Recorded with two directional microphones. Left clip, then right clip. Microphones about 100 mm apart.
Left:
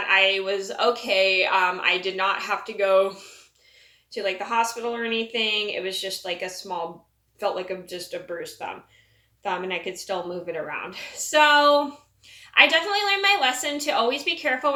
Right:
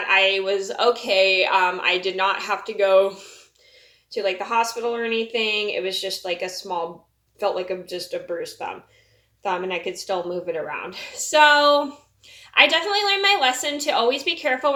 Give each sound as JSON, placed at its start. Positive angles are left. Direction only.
{"t": 0.0, "sound": "a woman's voice", "side_deg": -15}